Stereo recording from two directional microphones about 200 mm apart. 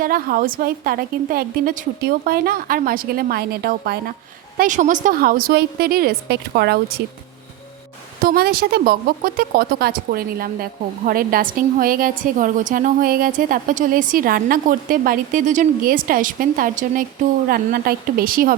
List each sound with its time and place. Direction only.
0.0 s speech: 45° right (ahead or behind)
8.2 s speech: 50° right (ahead or behind)